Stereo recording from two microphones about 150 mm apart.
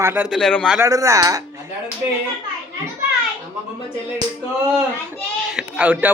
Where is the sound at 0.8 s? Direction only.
20° right (ahead or behind).